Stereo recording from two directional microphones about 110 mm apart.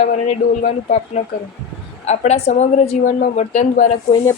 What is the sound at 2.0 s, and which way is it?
A woman's voice, 80° left.